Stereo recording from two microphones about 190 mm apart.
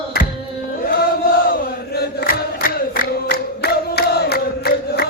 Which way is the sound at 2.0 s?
55° left (ahead or behind).